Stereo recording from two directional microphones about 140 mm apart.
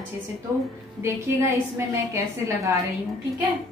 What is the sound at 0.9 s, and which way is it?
A woman's voice, 20° right (ahead or behind).